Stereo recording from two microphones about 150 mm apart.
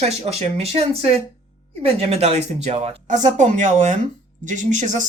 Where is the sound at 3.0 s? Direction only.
55° right (ahead or behind).